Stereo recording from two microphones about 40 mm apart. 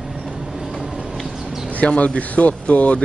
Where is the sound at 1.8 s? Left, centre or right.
Left.